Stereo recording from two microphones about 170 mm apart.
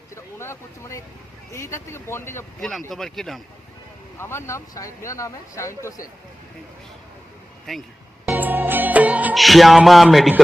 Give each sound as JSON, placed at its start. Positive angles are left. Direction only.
{"t": 0.3, "sound": "speech", "side_deg": 15}
{"t": 2.6, "sound": "speech", "side_deg": 0}
{"t": 4.2, "sound": "speech", "side_deg": 15}
{"t": 7.7, "sound": "speech", "side_deg": 0}
{"t": 8.3, "sound": "music", "side_deg": -10}